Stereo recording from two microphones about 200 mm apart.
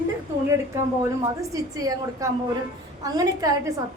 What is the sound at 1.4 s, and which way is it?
A woman's voice, 15° right (ahead or behind).